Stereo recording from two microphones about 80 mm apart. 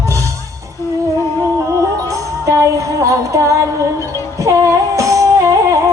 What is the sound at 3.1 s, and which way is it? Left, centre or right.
Music, right.